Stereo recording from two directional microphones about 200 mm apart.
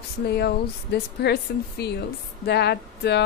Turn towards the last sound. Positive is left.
turn(degrees=55)  # may be behind; listen again after turning